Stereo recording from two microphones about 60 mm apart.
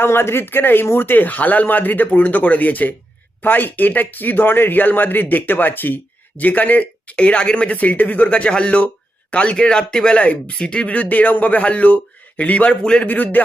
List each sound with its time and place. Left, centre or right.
0.0 s speech: left; by 13.1 s centre
13.1 s speech: left